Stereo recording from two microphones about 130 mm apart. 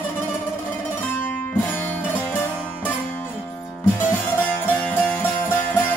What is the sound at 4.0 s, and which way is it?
Music, 15° left (ahead or behind).